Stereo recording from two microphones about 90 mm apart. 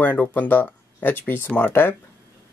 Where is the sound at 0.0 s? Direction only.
20° left (ahead or behind).